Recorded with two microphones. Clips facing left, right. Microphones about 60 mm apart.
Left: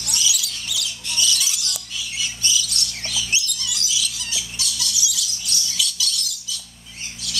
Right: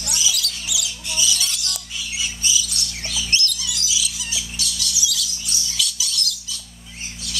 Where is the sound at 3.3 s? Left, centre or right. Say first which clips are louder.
Right 3 dB; centre.